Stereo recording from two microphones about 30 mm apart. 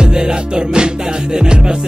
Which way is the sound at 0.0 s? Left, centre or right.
Right.